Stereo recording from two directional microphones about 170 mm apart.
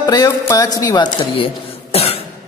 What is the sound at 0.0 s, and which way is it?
Music, 25° left (ahead or behind).